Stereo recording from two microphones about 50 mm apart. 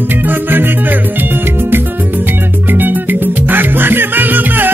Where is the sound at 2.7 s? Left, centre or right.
Right.